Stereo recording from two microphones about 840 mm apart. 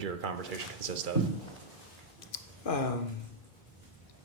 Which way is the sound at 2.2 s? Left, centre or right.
Left.